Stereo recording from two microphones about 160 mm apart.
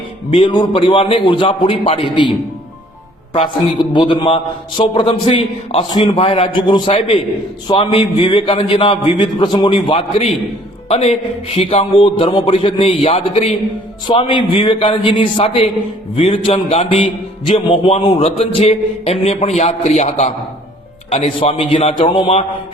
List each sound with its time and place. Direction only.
0.3 s a man's voice: 30° left (ahead or behind)
3.3 s a man's voice: 30° left (ahead or behind)
5.0 s a man's voice: 40° left (ahead or behind)
5.9 s a man's voice: 25° left (ahead or behind)
6.1 s a man's voice: 40° left (ahead or behind)